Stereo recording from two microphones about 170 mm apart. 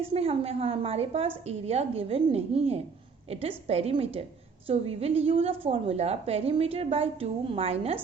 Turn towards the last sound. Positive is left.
turn(degrees=-35)  # may be behind; listen again after turning